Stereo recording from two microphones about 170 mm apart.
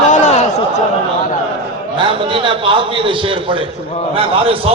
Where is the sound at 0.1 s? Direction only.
45° left (ahead or behind).